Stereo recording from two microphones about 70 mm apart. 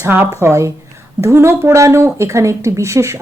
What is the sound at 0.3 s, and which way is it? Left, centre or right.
A woman's voice, right.